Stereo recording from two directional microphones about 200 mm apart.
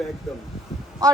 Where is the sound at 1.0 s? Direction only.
15° right (ahead or behind).